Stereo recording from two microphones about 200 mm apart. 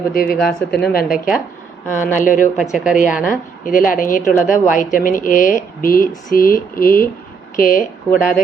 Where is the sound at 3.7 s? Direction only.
45° left (ahead or behind).